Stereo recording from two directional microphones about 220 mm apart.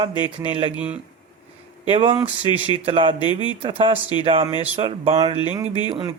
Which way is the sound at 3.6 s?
25° right (ahead or behind).